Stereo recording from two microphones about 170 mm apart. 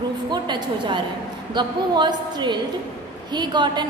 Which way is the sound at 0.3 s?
25° right (ahead or behind).